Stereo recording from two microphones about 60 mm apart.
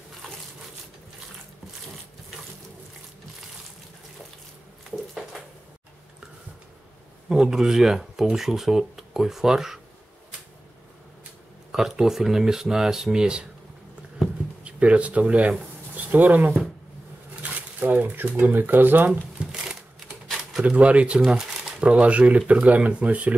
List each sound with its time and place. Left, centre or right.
4.9 s a sound: centre
7.2 s speech: centre
11.7 s speech: centre
14.6 s speech: right
19.4 s a sound: centre
20.6 s speech: right
21.2 s speech: centre; by 23.3 s right